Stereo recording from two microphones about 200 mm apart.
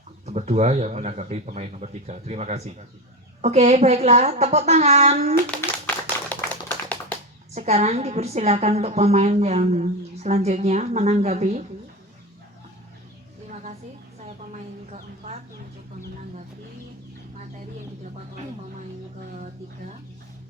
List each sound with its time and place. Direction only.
0.3 s a woman's voice: 35° right (ahead or behind)
5.5 s a sound: 5° left (ahead or behind)
7.5 s a woman's voice: 35° right (ahead or behind)
14.9 s speech: 35° right (ahead or behind)